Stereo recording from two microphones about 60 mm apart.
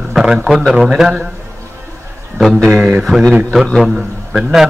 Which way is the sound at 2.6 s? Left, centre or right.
Centre.